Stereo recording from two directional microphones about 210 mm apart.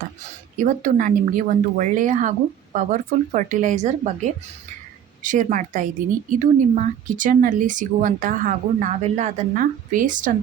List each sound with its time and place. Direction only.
0.5 s speech: 35° right (ahead or behind)